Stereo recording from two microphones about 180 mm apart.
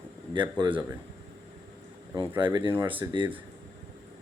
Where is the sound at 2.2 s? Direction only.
25° right (ahead or behind).